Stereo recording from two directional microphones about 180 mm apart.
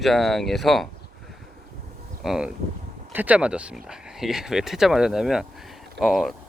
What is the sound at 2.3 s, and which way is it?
Speech, 5° right (ahead or behind).